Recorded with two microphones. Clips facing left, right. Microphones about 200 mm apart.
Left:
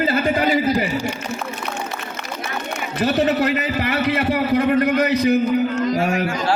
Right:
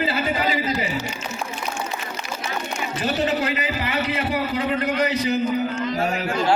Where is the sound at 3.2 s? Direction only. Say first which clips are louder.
Left 4 dB; 60° left (ahead or behind).